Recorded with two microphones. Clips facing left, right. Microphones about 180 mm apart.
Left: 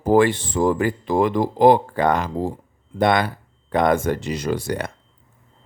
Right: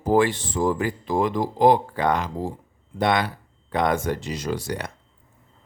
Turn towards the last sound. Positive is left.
turn(degrees=50)  # may be behind; listen again after turning